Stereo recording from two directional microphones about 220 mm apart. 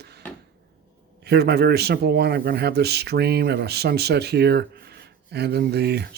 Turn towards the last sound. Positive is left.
turn(degrees=-45)  # may be behind; listen again after turning